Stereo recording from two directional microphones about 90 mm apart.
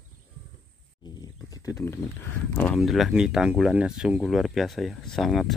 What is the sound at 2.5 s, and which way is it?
Speech, 20° left (ahead or behind).